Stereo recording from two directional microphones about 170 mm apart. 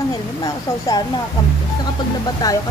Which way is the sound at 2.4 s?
20° left (ahead or behind).